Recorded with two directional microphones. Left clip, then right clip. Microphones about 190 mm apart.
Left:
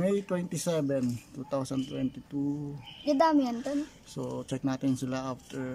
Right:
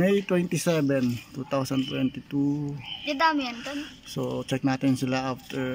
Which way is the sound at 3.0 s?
35° left (ahead or behind).